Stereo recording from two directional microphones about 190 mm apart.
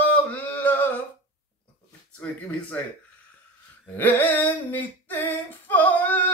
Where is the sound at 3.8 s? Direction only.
10° left (ahead or behind).